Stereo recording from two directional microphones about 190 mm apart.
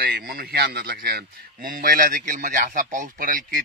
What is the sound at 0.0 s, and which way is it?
A man's voice, 50° right (ahead or behind).